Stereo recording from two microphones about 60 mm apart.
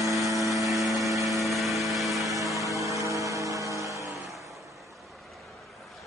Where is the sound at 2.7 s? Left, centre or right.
Right.